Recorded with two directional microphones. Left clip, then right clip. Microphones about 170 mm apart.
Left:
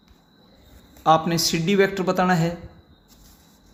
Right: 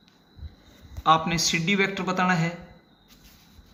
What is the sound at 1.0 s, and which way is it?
Speech, 45° left (ahead or behind).